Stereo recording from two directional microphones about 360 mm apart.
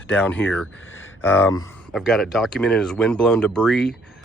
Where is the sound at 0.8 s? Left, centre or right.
Left.